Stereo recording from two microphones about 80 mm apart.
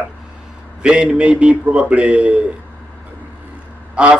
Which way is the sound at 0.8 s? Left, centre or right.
Centre.